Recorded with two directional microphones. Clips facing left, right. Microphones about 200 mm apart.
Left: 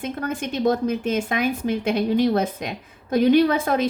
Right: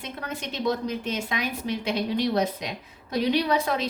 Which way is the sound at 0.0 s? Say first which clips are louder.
Left 8 dB; 50° left (ahead or behind).